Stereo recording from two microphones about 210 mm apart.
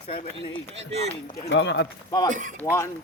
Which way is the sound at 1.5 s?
55° left (ahead or behind).